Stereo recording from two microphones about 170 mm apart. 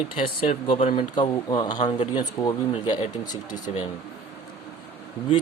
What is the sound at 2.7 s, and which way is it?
Speech, 30° left (ahead or behind).